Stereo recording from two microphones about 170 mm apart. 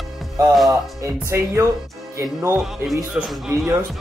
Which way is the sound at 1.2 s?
15° right (ahead or behind).